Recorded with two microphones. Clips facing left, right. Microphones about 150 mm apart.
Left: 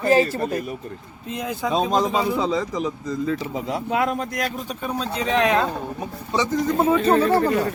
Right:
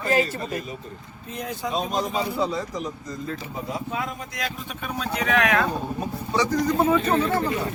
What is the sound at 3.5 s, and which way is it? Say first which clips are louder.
Speech: left 6 dB; 75° left (ahead or behind).